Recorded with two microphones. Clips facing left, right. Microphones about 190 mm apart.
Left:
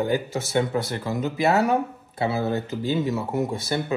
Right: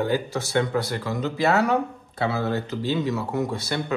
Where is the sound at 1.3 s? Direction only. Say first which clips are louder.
Even; 20° left (ahead or behind).